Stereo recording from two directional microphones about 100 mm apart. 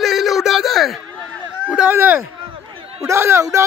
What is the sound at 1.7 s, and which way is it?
A man's voice, 10° right (ahead or behind).